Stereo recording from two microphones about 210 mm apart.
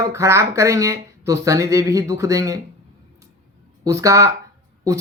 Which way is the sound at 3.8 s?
15° right (ahead or behind).